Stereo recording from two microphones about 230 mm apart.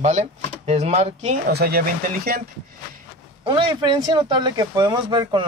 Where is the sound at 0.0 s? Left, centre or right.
Right.